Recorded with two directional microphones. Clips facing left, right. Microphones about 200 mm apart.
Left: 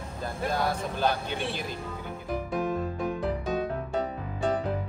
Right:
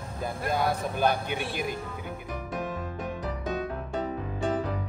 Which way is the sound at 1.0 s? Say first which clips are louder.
Right 2 dB; 15° right (ahead or behind).